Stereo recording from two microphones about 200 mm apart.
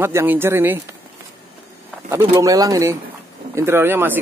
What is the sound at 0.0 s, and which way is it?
Speech, 10° right (ahead or behind).